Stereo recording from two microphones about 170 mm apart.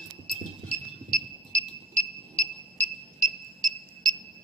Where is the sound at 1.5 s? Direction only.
50° right (ahead or behind).